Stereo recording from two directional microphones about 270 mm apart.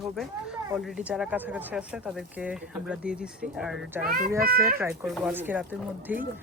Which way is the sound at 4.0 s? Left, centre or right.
Right.